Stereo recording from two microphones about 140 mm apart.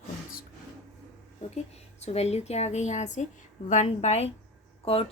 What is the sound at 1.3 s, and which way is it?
A woman's voice, 50° left (ahead or behind).